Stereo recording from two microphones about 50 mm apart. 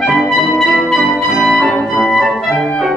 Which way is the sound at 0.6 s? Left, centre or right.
Centre.